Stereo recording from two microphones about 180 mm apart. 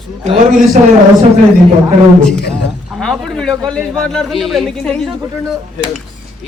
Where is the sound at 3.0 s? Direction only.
Centre (ahead or behind).